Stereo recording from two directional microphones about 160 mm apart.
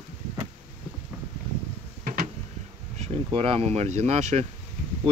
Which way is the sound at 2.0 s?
60° right (ahead or behind).